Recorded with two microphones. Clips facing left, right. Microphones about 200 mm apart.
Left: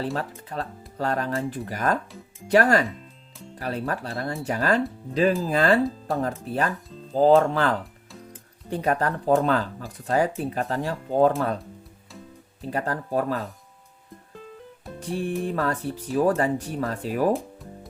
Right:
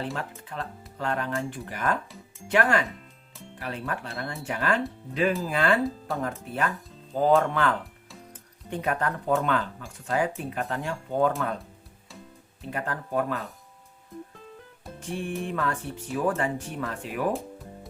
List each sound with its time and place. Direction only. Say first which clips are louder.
0.0 s speech: left 4 dB; 35° left (ahead or behind)
12.7 s speech: left 3 dB; 35° left (ahead or behind)
14.9 s music: left 4 dB; 35° left (ahead or behind)
15.4 s speech: left 4 dB; 35° left (ahead or behind)